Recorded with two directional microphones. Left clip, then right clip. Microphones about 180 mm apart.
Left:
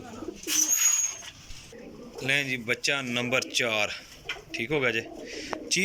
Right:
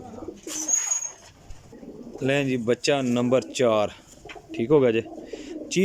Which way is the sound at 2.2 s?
50° right (ahead or behind).